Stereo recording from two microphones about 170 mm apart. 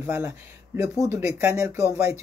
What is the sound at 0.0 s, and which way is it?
Speech, 15° right (ahead or behind).